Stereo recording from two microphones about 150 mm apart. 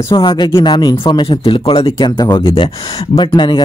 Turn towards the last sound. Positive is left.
turn(degrees=30)  # may be behind; listen again after turning